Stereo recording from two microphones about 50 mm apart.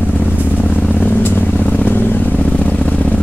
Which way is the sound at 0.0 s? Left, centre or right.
Left.